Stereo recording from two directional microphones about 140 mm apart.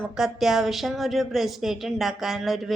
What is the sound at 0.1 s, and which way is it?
A woman's voice, centre (ahead or behind).